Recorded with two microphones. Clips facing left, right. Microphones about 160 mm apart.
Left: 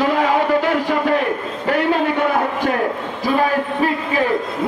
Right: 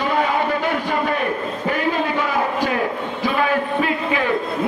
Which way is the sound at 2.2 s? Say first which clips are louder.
Left 2 dB; 55° left (ahead or behind).